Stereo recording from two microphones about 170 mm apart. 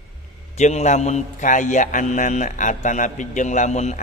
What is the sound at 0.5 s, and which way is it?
A man's voice, 45° left (ahead or behind).